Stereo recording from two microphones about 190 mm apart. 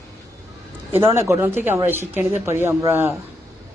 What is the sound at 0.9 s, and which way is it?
A woman's voice, 15° right (ahead or behind).